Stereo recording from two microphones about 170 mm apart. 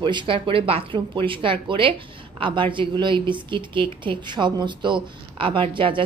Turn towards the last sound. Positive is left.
turn(degrees=-30)  # may be behind; listen again after turning